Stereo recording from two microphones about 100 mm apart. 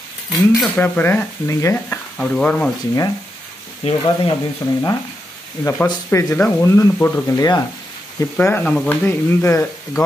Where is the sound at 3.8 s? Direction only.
90° left.